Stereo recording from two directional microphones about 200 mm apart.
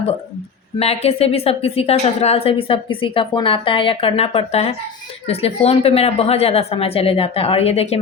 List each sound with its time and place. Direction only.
0.8 s a woman's voice: 30° left (ahead or behind)